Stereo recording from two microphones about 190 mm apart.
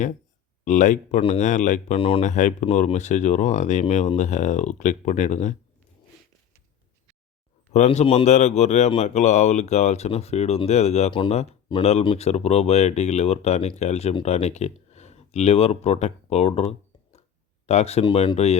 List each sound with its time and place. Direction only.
0.6 s speech: 40° left (ahead or behind)
2.0 s speech: 30° left (ahead or behind)
7.7 s speech: 35° left (ahead or behind)
17.7 s speech: 35° left (ahead or behind)